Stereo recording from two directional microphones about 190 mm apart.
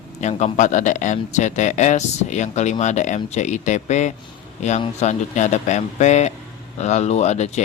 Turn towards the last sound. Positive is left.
turn(degrees=35)  # may be behind; listen again after turning